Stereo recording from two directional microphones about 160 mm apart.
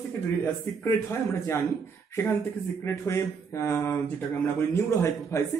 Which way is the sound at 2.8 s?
20° left (ahead or behind).